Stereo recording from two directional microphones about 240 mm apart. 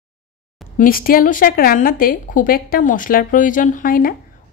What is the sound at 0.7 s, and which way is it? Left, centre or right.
A woman's voice, left.